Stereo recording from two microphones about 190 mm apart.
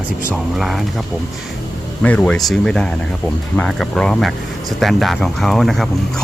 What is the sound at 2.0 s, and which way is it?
Speech, 10° left (ahead or behind).